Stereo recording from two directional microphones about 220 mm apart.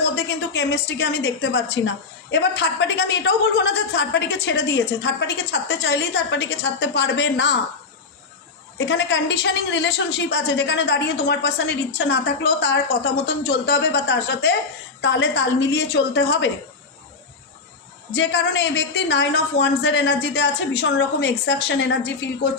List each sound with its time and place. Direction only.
0.2 s a woman's voice: 50° left (ahead or behind)
8.8 s a woman's voice: 55° left (ahead or behind)
18.1 s a woman's voice: 50° left (ahead or behind)